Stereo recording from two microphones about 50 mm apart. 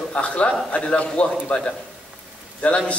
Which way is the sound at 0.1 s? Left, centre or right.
Left.